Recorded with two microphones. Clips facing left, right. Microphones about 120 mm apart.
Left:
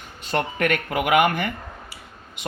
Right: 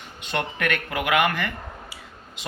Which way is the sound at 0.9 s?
20° left (ahead or behind).